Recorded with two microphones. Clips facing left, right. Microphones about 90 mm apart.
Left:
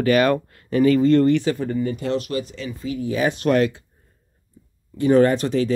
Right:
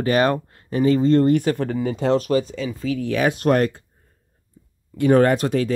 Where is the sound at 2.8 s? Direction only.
80° right; by 3.8 s 50° right (ahead or behind).